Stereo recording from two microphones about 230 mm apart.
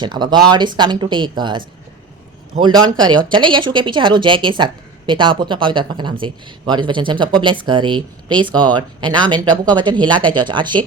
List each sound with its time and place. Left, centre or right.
0.0 s a woman's voice: centre